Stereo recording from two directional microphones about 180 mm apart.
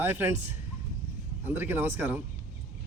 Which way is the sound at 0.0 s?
10° right (ahead or behind).